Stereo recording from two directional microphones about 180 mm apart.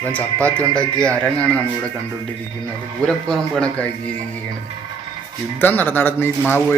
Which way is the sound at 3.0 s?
5° left (ahead or behind).